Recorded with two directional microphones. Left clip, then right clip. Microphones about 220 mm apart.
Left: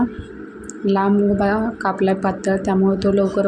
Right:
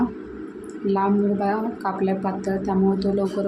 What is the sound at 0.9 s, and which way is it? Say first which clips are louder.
A woman's voice: left 4 dB; 20° left (ahead or behind).